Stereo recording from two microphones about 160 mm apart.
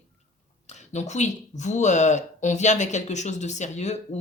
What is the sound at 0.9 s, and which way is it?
Speech, 45° left (ahead or behind).